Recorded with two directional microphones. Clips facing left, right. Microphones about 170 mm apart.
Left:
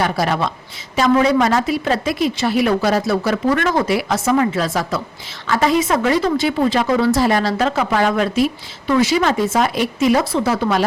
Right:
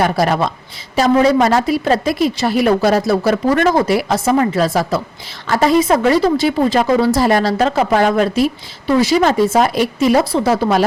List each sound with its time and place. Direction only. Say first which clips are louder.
0.0 s a woman's voice: right 4 dB; 40° right (ahead or behind)